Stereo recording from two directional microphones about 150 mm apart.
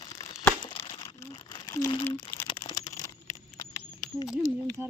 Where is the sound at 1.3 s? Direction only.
30° left (ahead or behind).